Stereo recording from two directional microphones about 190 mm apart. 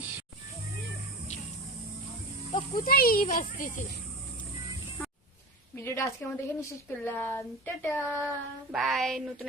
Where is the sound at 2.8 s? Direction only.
50° left (ahead or behind).